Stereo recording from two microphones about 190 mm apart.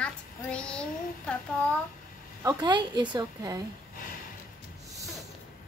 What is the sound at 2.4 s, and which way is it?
A woman's voice, 20° right (ahead or behind).